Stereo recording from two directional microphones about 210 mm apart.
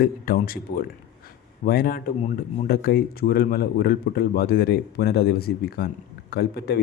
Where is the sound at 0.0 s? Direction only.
45° left (ahead or behind).